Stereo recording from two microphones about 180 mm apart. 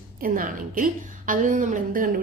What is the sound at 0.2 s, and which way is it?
A woman's voice, 50° right (ahead or behind).